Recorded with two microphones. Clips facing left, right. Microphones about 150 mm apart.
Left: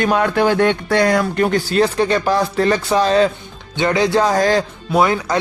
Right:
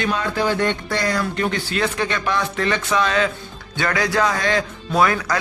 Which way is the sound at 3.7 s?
25° left (ahead or behind).